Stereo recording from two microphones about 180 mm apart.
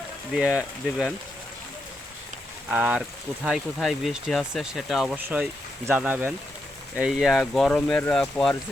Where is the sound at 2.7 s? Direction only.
5° right (ahead or behind).